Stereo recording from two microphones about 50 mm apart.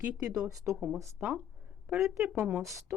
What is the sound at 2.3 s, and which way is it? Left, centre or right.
Speech, centre.